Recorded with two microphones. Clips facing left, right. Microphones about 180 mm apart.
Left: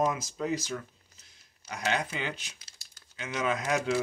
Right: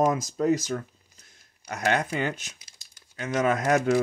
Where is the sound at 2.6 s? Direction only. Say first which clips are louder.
Right 1 dB; 15° right (ahead or behind).